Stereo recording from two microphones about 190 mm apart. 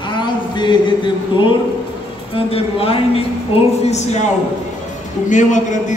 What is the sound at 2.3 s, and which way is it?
Speech, 30° left (ahead or behind).